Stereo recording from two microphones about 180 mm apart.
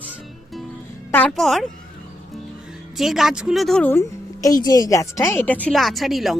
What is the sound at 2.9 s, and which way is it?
Speech, centre (ahead or behind).